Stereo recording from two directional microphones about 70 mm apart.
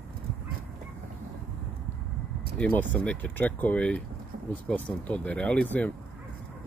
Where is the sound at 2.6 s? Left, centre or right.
Left.